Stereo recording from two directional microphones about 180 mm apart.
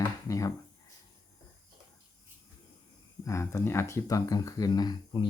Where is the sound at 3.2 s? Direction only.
15° left (ahead or behind).